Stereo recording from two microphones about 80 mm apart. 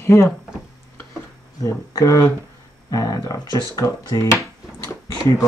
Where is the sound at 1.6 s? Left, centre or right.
Left.